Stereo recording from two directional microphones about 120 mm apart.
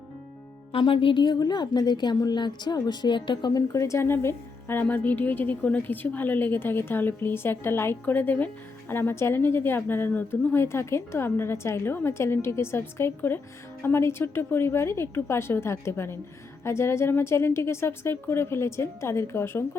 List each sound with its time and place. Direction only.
0.7 s a woman's voice: 45° left (ahead or behind); by 19.6 s 20° left (ahead or behind)